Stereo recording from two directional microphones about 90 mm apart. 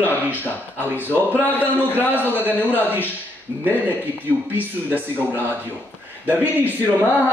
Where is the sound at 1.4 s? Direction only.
20° left (ahead or behind).